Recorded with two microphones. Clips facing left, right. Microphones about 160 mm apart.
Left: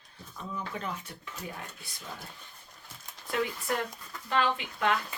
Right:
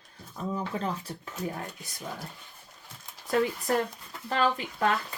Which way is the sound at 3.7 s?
35° right (ahead or behind).